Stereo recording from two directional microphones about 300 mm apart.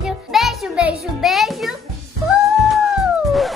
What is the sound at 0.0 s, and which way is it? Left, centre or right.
Music, centre.